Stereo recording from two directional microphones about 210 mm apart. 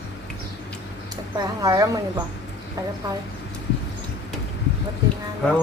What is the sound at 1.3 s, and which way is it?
Speech, 15° right (ahead or behind).